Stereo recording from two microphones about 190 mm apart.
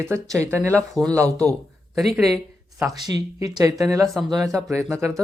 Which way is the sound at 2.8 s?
20° right (ahead or behind).